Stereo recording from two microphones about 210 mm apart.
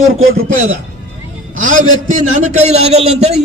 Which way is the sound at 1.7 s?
35° right (ahead or behind).